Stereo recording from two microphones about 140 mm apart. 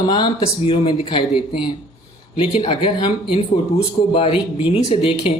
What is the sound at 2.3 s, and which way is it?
A woman's voice, 35° left (ahead or behind).